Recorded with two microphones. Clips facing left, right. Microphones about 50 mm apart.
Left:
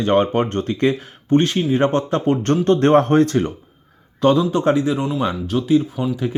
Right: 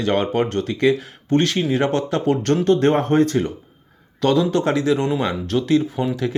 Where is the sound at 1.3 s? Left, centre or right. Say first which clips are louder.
Left 2 dB; left.